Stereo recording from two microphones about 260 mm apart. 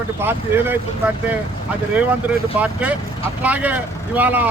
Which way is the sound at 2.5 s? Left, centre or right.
Centre.